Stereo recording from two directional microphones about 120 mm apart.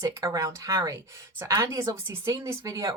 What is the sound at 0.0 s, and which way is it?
Speech, 25° right (ahead or behind).